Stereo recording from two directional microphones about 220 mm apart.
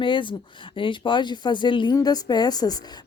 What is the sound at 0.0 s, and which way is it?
Speech, 20° left (ahead or behind).